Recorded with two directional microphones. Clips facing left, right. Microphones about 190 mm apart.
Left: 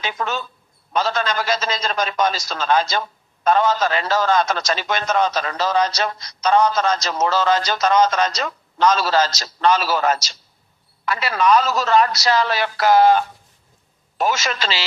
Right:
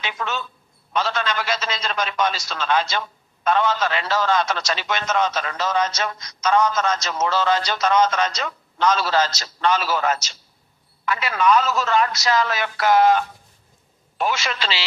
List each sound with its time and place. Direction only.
0.0 s a man's voice: 40° left (ahead or behind)